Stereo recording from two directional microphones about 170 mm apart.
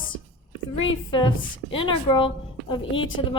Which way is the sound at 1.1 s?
30° left (ahead or behind).